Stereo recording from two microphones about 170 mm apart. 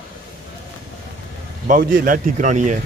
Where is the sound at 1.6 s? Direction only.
50° right (ahead or behind).